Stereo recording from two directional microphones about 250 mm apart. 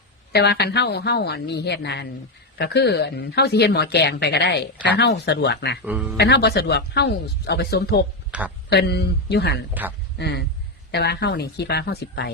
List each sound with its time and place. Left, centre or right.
0.3 s speech: left
5.8 s speech: centre
6.1 s speech: left
8.3 s speech: centre
8.7 s speech: left